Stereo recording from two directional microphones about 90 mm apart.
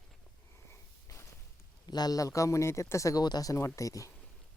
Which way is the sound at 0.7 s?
35° left (ahead or behind).